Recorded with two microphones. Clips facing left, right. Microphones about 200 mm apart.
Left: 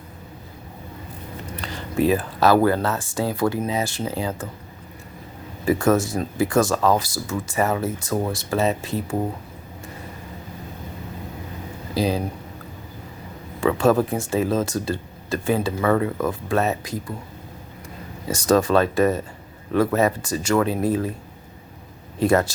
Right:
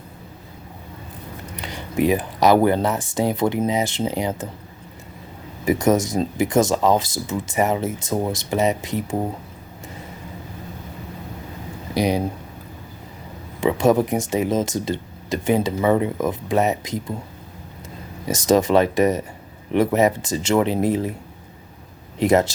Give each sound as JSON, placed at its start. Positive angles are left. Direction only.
{"t": 1.6, "sound": "speech", "side_deg": -15}
{"t": 5.6, "sound": "speech", "side_deg": -15}
{"t": 11.9, "sound": "speech", "side_deg": -15}
{"t": 13.6, "sound": "speech", "side_deg": -15}
{"t": 18.3, "sound": "speech", "side_deg": -20}
{"t": 22.2, "sound": "speech", "side_deg": -20}